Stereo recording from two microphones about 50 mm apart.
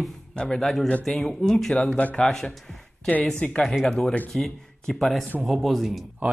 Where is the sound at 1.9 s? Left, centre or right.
Left.